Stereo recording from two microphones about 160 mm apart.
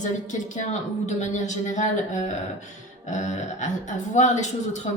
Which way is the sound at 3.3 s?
50° left (ahead or behind).